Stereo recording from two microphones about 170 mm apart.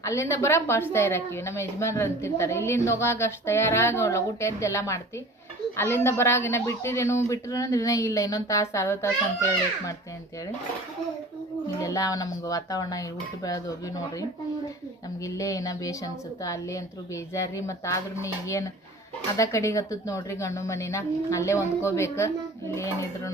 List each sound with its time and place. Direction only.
0.0 s a woman's voice: 15° left (ahead or behind)
11.8 s a woman's voice: 20° left (ahead or behind)